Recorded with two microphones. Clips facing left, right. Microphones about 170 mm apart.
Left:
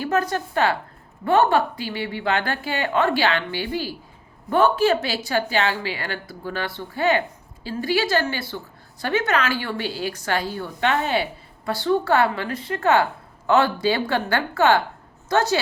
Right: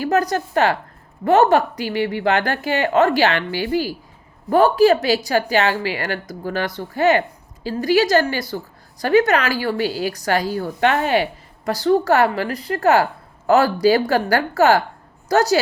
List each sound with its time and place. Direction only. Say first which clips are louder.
0.0 s a woman's voice: right 4 dB; 40° right (ahead or behind)